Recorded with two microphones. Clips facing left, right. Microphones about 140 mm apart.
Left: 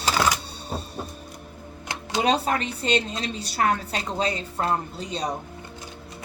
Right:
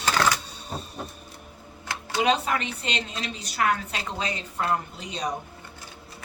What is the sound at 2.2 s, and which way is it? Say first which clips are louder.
A woman's voice: left 1 dB; 35° left (ahead or behind).